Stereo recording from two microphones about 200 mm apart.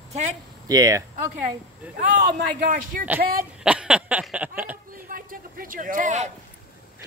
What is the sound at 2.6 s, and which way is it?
Speech, 45° right (ahead or behind).